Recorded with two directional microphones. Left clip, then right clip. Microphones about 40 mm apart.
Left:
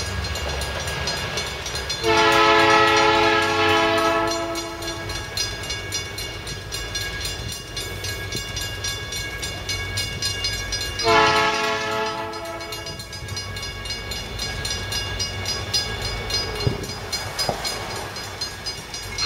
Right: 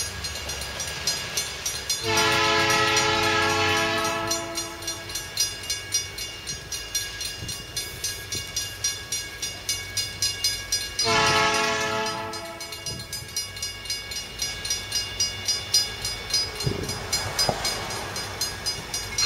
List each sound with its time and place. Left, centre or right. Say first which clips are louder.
0.5 s train: left 5 dB; right
8.5 s train: right 1 dB; right
14.4 s train: left 1 dB; right